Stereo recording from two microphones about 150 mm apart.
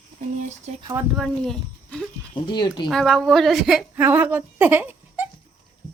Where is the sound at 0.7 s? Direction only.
50° right (ahead or behind).